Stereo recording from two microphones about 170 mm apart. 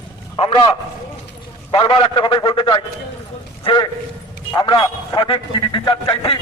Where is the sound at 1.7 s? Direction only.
30° left (ahead or behind).